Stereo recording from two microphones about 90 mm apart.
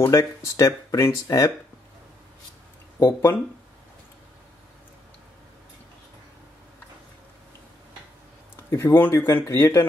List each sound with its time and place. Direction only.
0.0 s speech: 35° left (ahead or behind)
3.0 s speech: 30° left (ahead or behind)
8.5 s speech: 30° left (ahead or behind)